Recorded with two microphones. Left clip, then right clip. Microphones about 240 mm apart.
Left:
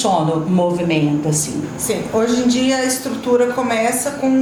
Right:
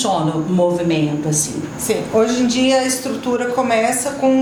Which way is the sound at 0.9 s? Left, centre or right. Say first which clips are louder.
Left 1 dB; left.